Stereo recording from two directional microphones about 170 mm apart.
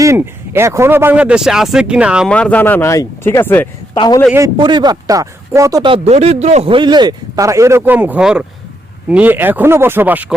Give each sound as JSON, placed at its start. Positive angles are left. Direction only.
{"t": 0.0, "sound": "speech", "side_deg": -15}
{"t": 2.3, "sound": "speech", "side_deg": 10}
{"t": 3.9, "sound": "a man's voice", "side_deg": 25}
{"t": 4.3, "sound": "speech", "side_deg": -20}
{"t": 5.9, "sound": "speech", "side_deg": -40}